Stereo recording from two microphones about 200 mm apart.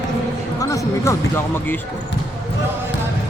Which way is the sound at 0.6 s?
15° left (ahead or behind).